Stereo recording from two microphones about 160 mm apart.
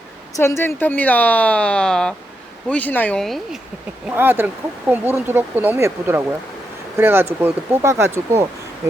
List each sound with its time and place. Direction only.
0.3 s speech: 15° left (ahead or behind); by 3.6 s centre (ahead or behind)
4.1 s speech: 15° right (ahead or behind)